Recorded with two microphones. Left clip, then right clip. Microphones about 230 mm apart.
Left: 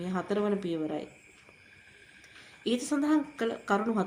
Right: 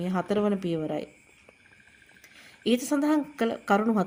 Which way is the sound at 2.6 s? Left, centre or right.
Right.